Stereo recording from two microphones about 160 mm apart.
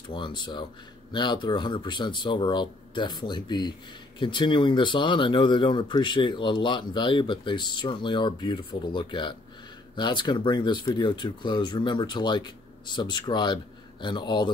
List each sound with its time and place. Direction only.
0.1 s speech: 30° left (ahead or behind)